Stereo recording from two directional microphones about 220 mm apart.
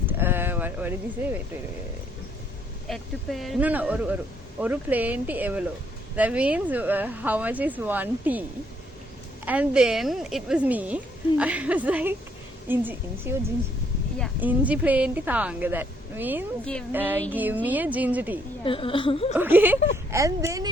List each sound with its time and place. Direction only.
0.0 s sheep: 10° right (ahead or behind)
2.9 s a woman's voice: centre (ahead or behind)
9.5 s a woman's voice: 5° right (ahead or behind)
14.4 s speech: 5° right (ahead or behind)
18.6 s a woman's voice: 25° left (ahead or behind)
19.4 s speech: 10° right (ahead or behind)